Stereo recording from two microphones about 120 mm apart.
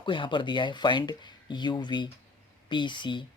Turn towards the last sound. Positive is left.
turn(degrees=40)  # may be behind; listen again after turning